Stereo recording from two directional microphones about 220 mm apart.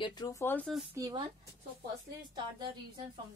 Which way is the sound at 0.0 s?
15° left (ahead or behind).